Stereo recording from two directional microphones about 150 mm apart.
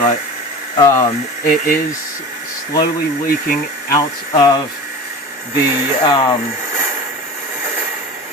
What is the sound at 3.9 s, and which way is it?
Speech, 25° left (ahead or behind).